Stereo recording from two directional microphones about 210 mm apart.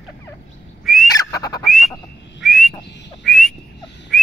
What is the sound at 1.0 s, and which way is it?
Fowl, 15° left (ahead or behind).